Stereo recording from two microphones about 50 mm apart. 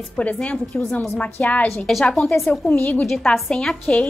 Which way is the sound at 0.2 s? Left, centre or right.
Left.